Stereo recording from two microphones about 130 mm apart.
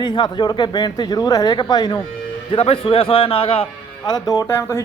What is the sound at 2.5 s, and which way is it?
A man's voice, 45° left (ahead or behind).